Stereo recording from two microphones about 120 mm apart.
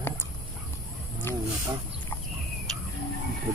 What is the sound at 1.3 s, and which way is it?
Wild animals, 20° left (ahead or behind).